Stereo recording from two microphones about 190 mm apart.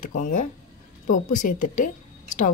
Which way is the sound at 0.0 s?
45° left (ahead or behind).